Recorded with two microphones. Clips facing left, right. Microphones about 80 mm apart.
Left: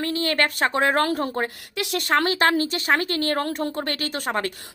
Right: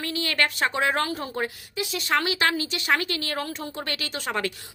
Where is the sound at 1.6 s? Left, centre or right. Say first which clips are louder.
Left 4 dB; left.